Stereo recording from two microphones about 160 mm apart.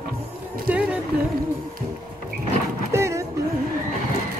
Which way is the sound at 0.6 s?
10° right (ahead or behind).